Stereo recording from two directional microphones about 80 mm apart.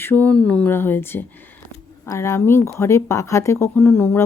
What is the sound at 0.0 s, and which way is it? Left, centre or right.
Speech, left.